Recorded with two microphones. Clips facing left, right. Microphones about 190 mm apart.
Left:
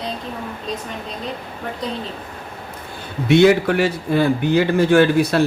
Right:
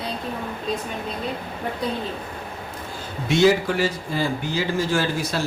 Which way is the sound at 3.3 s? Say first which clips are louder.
Left 5 dB; 60° left (ahead or behind).